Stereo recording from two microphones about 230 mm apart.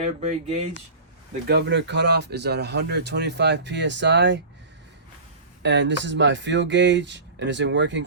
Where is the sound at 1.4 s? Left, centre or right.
Right.